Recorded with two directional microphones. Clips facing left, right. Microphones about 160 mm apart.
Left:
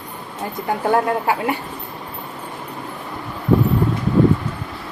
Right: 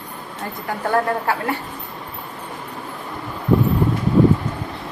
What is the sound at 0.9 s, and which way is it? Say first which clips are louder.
Speech: left 1 dB; 15° left (ahead or behind).